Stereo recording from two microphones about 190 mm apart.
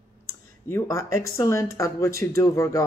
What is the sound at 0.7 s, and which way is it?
Speech, 15° left (ahead or behind).